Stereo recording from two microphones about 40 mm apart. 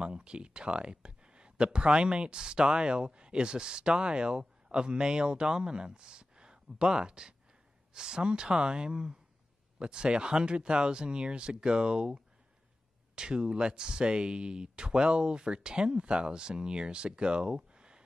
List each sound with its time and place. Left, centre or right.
0.0 s speech: right